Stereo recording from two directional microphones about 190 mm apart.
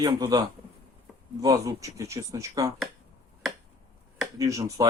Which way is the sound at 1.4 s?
20° right (ahead or behind).